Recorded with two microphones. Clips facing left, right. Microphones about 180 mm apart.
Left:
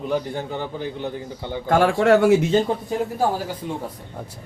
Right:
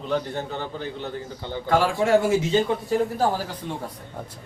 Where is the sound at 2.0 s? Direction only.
70° left (ahead or behind).